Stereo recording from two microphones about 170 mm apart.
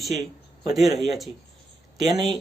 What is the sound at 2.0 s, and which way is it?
Speech, 25° right (ahead or behind).